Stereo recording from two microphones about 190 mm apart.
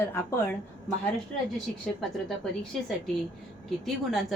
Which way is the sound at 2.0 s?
Centre (ahead or behind).